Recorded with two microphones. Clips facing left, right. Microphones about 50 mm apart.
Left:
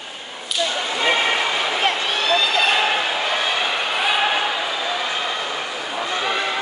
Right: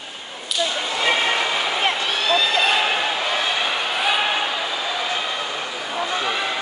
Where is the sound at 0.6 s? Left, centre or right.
Centre.